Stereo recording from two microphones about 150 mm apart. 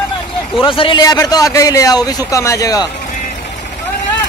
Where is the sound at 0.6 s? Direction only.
35° left (ahead or behind).